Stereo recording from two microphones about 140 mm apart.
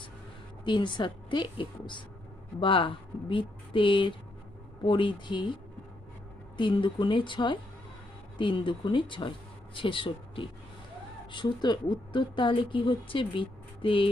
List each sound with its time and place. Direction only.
0.6 s speech: 35° left (ahead or behind)
6.6 s speech: 35° left (ahead or behind)